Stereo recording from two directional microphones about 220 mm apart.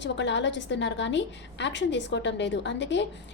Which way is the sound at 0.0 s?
55° left (ahead or behind).